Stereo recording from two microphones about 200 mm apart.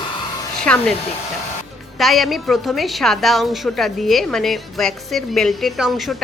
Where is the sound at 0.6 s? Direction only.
5° left (ahead or behind).